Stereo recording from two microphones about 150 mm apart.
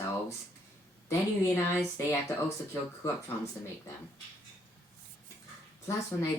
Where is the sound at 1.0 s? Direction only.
15° left (ahead or behind).